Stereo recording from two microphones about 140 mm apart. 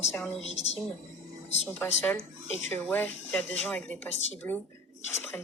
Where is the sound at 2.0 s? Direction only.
10° left (ahead or behind).